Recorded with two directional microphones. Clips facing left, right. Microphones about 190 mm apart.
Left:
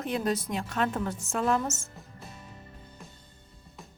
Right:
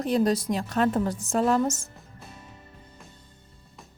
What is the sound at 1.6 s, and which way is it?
Speech, 15° right (ahead or behind).